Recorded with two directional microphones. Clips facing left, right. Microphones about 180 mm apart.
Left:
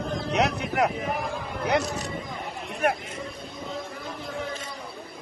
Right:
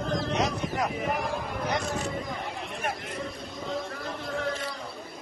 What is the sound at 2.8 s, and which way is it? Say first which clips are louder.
Speech: left 9 dB; 65° left (ahead or behind).